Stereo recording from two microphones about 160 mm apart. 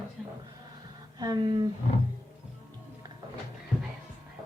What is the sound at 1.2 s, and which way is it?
Speech, 25° right (ahead or behind).